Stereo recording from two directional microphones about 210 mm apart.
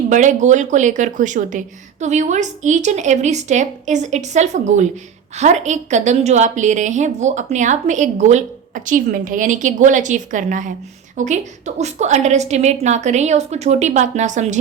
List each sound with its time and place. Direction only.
0.1 s a woman's voice: 35° right (ahead or behind)